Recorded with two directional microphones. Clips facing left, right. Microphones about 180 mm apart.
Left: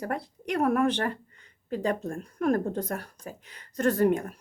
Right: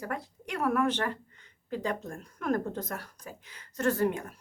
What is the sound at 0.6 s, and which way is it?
Speech, 40° left (ahead or behind).